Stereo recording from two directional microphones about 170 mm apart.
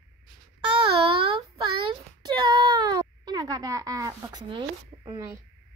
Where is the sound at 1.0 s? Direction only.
30° right (ahead or behind).